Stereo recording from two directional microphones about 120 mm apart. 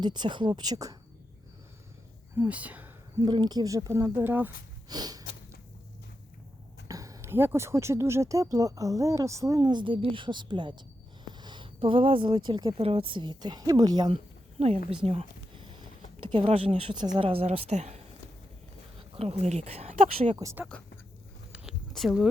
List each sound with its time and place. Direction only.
0.0 s a woman's voice: 40° right (ahead or behind)
2.3 s speech: 15° right (ahead or behind)
3.2 s speech: 35° right (ahead or behind); by 4.5 s 15° right (ahead or behind)
4.9 s a woman's voice: 35° right (ahead or behind)
6.8 s speech: 30° right (ahead or behind)
12.8 s a woman's voice: 50° right (ahead or behind); by 14.1 s 35° right (ahead or behind)
14.6 s a sound: 55° right (ahead or behind)
16.5 s a woman's voice: 50° right (ahead or behind)
18.9 s speech: 55° right (ahead or behind); by 20.3 s 75° right (ahead or behind)
21.5 s a sound: 5° right (ahead or behind)